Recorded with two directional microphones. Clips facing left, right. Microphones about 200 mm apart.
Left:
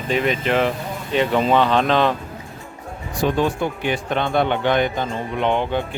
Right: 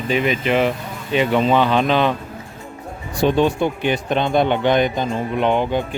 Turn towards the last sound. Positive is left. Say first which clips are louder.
# right 2 dB
turn(degrees=-10)  # may be behind; listen again after turning